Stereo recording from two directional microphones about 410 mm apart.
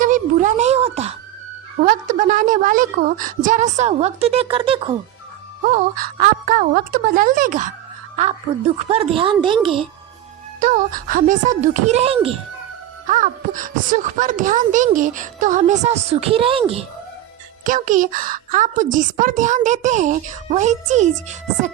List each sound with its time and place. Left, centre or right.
0.0 s a sound: centre
1.8 s a woman's voice: centre
8.9 s a woman's voice: centre